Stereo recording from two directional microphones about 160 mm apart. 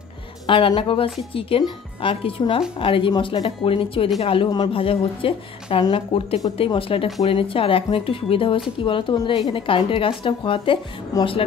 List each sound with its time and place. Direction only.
0.5 s speech: 30° left (ahead or behind)